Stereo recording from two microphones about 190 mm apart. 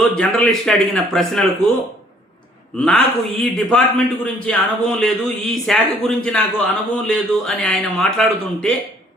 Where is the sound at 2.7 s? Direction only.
5° left (ahead or behind).